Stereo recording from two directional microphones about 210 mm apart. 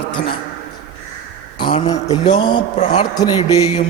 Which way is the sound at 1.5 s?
20° left (ahead or behind).